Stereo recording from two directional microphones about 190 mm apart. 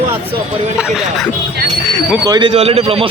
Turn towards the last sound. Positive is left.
turn(degrees=-30)  # may be behind; listen again after turning